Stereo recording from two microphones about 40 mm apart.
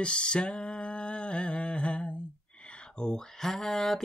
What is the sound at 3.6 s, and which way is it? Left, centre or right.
Mantra, centre.